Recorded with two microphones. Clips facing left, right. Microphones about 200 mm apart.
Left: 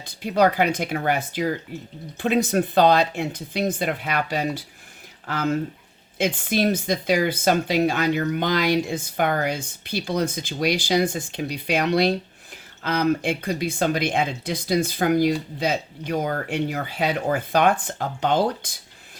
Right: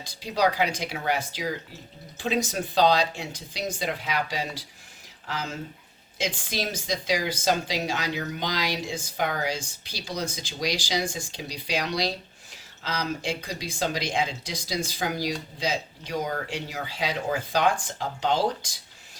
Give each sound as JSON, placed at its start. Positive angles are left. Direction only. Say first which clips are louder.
{"t": 0.0, "sound": "speech", "louder": "left 5 dB", "side_deg": 55}